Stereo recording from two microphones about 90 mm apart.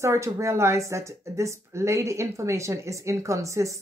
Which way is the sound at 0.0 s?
35° right (ahead or behind).